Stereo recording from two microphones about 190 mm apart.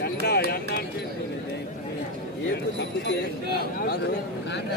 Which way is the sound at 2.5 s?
60° left (ahead or behind).